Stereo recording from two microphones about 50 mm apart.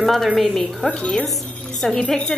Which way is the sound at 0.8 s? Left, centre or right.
Centre.